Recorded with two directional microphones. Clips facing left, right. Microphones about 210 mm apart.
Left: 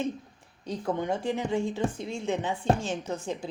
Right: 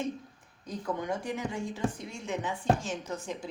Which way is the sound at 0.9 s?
25° left (ahead or behind).